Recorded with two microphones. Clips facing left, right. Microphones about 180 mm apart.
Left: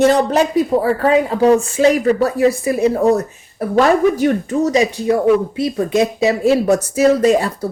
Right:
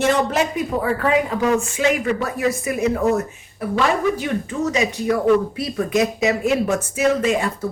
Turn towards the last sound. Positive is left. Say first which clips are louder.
# left 6 dB
turn(degrees=35)  # may be behind; listen again after turning